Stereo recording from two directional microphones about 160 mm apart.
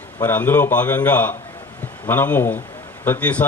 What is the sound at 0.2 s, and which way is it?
A man's voice, 10° left (ahead or behind).